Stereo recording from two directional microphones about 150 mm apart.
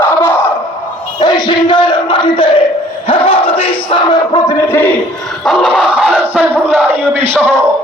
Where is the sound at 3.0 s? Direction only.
40° left (ahead or behind).